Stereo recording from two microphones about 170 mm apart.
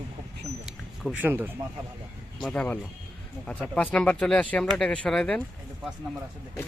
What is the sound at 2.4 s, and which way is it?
Speech, 10° left (ahead or behind).